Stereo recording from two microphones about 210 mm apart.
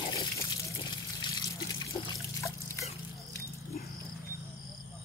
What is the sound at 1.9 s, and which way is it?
Trickle, 20° left (ahead or behind).